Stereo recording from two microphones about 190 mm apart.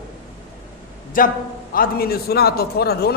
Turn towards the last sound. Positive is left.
turn(degrees=55)  # may be behind; listen again after turning